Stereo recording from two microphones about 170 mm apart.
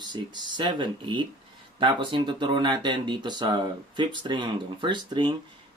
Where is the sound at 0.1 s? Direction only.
25° right (ahead or behind).